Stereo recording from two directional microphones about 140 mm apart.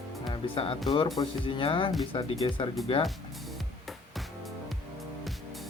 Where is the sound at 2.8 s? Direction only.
Centre (ahead or behind).